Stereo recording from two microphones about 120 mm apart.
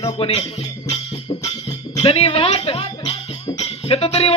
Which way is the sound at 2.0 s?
55° left (ahead or behind).